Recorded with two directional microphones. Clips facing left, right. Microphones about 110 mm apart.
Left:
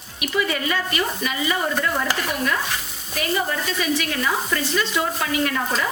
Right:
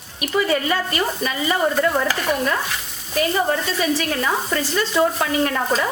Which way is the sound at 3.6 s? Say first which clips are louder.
Right 2 dB; 35° right (ahead or behind).